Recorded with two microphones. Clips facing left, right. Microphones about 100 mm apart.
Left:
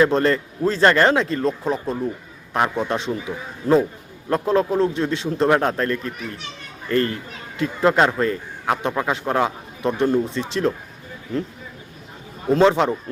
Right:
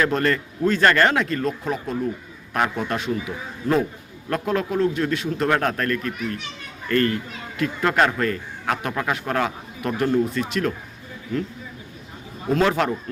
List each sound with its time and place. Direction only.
0.0 s a man's voice: 25° left (ahead or behind)
12.5 s a man's voice: 25° left (ahead or behind)